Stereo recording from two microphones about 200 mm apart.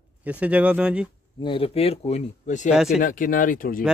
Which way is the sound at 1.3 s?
25° left (ahead or behind).